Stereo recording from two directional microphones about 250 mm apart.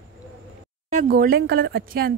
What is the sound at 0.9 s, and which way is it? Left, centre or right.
Speech, right.